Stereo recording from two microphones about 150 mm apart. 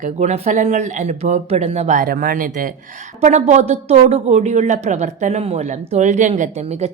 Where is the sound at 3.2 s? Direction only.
50° right (ahead or behind).